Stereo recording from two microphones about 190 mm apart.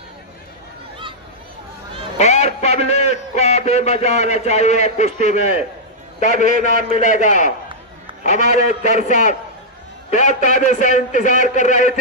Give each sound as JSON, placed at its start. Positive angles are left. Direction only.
{"t": 2.1, "sound": "a man's voice", "side_deg": 35}